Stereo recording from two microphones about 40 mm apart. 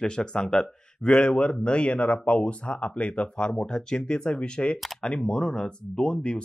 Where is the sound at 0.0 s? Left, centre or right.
Left.